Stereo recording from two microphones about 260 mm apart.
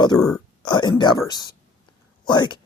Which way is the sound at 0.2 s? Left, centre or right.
Centre.